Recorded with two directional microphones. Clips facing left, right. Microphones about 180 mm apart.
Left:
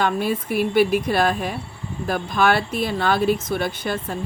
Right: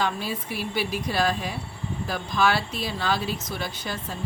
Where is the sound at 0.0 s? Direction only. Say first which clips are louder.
Left 6 dB; 55° left (ahead or behind).